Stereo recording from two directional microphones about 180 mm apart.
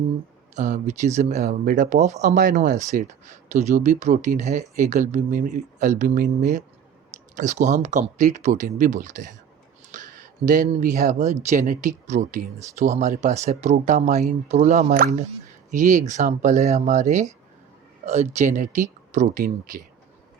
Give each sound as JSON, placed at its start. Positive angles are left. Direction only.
{"t": 0.5, "sound": "speech", "side_deg": -40}